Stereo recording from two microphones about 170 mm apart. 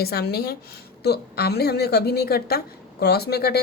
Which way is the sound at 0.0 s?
65° left (ahead or behind).